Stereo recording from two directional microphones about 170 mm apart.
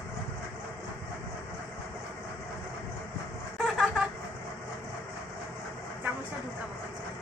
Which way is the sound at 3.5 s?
5° right (ahead or behind).